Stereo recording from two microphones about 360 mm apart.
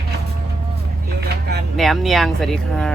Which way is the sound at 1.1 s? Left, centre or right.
Right.